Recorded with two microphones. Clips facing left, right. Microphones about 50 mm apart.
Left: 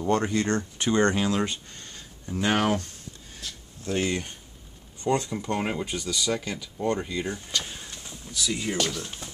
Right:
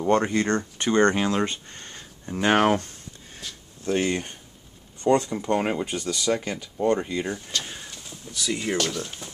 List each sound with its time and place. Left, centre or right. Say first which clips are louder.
0.0 s speech: right 3 dB; right
0.7 s speech: right 3 dB; centre
1.1 s speech: right 2 dB; centre
1.7 s speech: right 2 dB; right
3.3 s a sound: right 1 dB; centre
5.0 s speech: right 5 dB; centre
6.3 s speech: right 3 dB; right
6.8 s speech: right 4 dB; centre